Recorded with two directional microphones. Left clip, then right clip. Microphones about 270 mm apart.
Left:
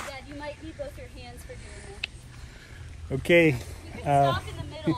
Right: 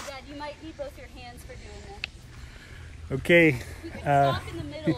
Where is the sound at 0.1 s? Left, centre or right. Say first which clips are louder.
Even; centre.